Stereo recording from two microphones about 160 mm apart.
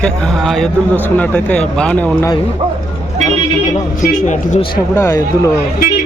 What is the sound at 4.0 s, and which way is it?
Speech, 50° left (ahead or behind).